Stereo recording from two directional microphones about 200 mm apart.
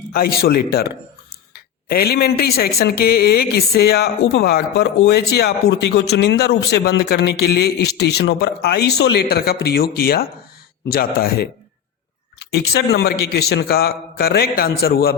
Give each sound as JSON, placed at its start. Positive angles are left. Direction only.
{"t": 0.1, "sound": "a woman's voice", "side_deg": 50}
{"t": 12.7, "sound": "a woman's voice", "side_deg": 55}